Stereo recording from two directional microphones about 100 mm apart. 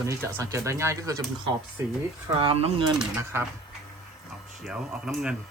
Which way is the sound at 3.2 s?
25° right (ahead or behind).